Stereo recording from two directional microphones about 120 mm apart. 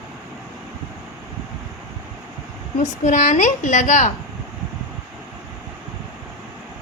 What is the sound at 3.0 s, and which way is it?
A woman's voice, 90° left.